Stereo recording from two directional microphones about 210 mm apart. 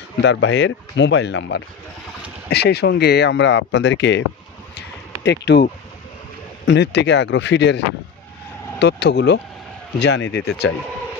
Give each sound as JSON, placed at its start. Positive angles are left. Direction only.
{"t": 0.2, "sound": "speech", "side_deg": 60}
{"t": 5.2, "sound": "speech", "side_deg": 55}